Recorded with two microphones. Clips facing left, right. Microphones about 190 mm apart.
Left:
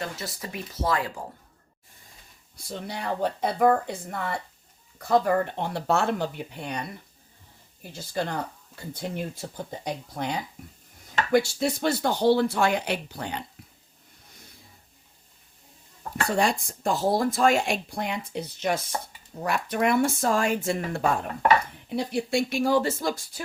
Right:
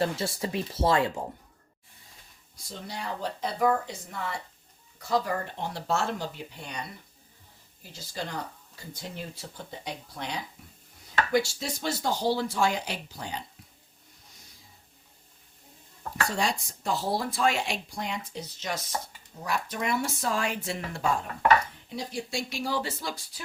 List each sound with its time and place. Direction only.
0.0 s speech: 30° right (ahead or behind)
2.6 s speech: 60° left (ahead or behind)
11.3 s speech: 55° left (ahead or behind)
16.3 s speech: 55° left (ahead or behind)